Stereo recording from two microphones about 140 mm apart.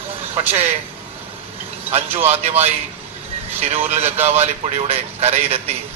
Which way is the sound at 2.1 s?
50° right (ahead or behind).